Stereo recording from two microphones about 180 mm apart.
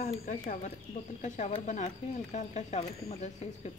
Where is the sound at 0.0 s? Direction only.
45° left (ahead or behind).